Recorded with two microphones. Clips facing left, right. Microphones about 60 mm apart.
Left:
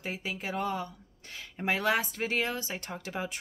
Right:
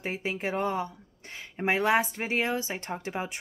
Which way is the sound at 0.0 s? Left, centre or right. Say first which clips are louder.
Right 5 dB; right.